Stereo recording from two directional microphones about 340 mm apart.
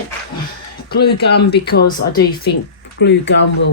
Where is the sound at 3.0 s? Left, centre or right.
Left.